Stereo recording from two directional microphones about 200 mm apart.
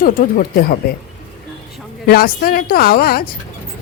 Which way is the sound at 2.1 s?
50° left (ahead or behind).